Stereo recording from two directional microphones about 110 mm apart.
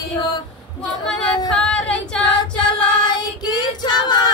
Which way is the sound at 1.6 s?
10° left (ahead or behind).